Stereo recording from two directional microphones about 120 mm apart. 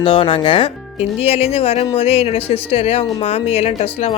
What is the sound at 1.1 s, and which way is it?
Speech, 55° left (ahead or behind).